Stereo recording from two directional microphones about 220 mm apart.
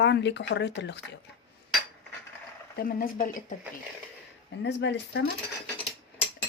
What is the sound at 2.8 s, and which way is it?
Speech, 40° left (ahead or behind).